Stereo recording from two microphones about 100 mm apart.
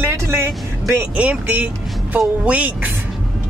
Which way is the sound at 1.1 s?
10° right (ahead or behind).